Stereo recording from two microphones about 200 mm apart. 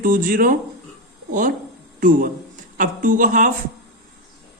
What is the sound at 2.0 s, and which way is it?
A woman's voice, 40° right (ahead or behind).